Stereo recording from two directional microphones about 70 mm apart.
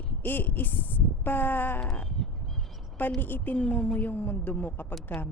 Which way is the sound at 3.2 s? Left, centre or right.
Left.